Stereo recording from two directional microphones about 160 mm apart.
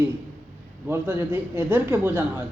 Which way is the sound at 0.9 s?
10° right (ahead or behind).